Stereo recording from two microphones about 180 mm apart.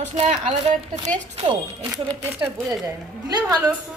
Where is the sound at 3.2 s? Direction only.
20° right (ahead or behind).